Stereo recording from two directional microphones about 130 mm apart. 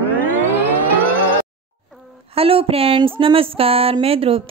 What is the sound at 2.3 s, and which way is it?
Speech, 45° right (ahead or behind).